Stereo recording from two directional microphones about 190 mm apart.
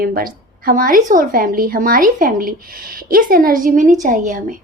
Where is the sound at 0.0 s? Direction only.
50° right (ahead or behind).